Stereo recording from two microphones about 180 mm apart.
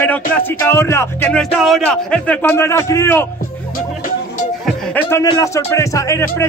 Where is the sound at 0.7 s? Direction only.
15° left (ahead or behind).